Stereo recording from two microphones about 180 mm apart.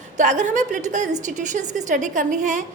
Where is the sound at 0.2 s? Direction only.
45° right (ahead or behind).